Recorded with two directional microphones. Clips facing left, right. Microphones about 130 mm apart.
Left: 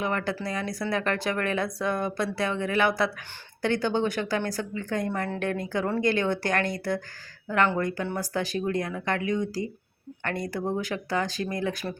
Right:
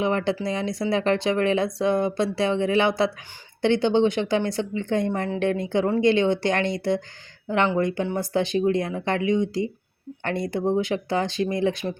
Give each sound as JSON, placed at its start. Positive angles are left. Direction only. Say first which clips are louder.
{"t": 0.0, "sound": "speech", "louder": "right 5 dB", "side_deg": -25}